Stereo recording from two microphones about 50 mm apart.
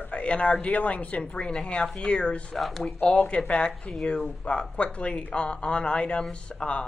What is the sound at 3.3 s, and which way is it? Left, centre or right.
A woman's voice, left.